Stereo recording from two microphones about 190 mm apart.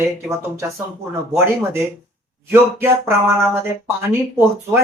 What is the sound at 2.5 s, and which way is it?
Speech, 10° right (ahead or behind).